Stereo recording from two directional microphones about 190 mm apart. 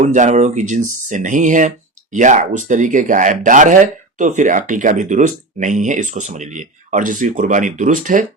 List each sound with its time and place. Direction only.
0.0 s speech: 40° right (ahead or behind)